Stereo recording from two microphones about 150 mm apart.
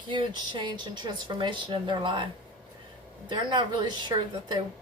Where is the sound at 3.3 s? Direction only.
30° right (ahead or behind).